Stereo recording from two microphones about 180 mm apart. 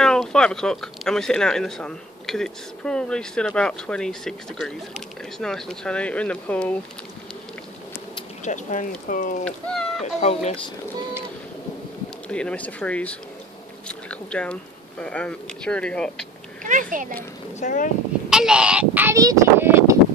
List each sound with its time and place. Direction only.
0.0 s speech: 5° left (ahead or behind)
8.5 s speech: 45° left (ahead or behind)
9.4 s speech: 5° left (ahead or behind)
10.2 s speech: 40° left (ahead or behind)
12.3 s speech: 5° left (ahead or behind)
16.6 s a child's voice: 45° right (ahead or behind)
17.6 s speech: 45° left (ahead or behind)
18.3 s speech: 5° right (ahead or behind)